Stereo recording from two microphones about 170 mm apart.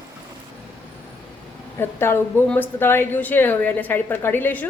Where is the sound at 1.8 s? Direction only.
15° left (ahead or behind).